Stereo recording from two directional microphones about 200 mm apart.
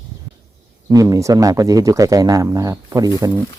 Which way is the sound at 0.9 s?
20° right (ahead or behind).